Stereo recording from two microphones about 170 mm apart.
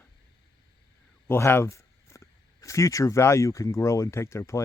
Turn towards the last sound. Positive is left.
turn(degrees=15)  # may be behind; listen again after turning